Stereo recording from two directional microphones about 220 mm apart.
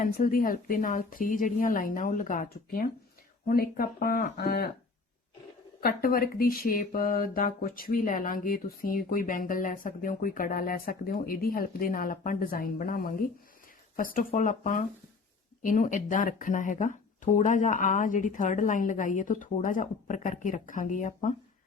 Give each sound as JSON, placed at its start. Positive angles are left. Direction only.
{"t": 0.0, "sound": "speech", "side_deg": 40}
{"t": 5.8, "sound": "speech", "side_deg": 40}